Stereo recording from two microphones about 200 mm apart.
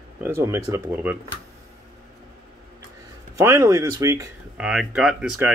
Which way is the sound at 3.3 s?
15° right (ahead or behind).